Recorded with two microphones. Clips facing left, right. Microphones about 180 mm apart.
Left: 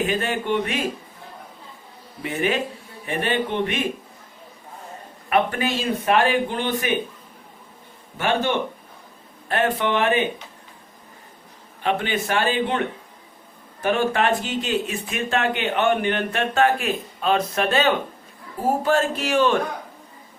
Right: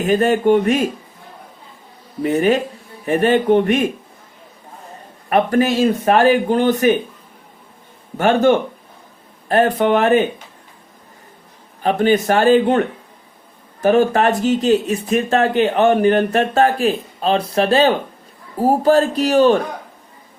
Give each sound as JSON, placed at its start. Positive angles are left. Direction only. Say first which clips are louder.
{"t": 0.0, "sound": "a man's voice", "louder": "right 9 dB", "side_deg": -45}
{"t": 2.2, "sound": "a man's voice", "louder": "right 8 dB", "side_deg": -40}
{"t": 5.3, "sound": "a man's voice", "louder": "right 6 dB", "side_deg": -40}
{"t": 8.2, "sound": "a man's voice", "louder": "right 8 dB", "side_deg": -45}
{"t": 11.8, "sound": "a man's voice", "louder": "right 8 dB", "side_deg": -40}
{"t": 13.8, "sound": "speech", "louder": "right 7 dB", "side_deg": -40}